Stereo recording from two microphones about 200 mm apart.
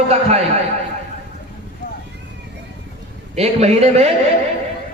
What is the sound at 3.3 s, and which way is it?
Speech, 35° right (ahead or behind).